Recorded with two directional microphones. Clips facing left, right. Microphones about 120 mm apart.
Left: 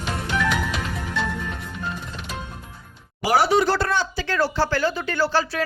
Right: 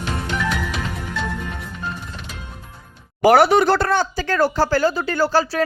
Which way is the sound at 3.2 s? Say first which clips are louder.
Right 6 dB; 60° right (ahead or behind).